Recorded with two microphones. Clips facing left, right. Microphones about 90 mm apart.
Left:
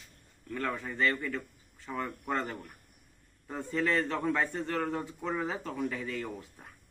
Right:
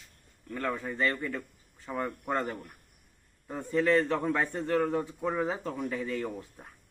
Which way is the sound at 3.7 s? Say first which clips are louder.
Right 5 dB; 25° right (ahead or behind).